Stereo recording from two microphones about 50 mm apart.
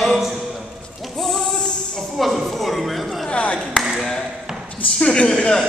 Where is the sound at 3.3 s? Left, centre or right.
Left.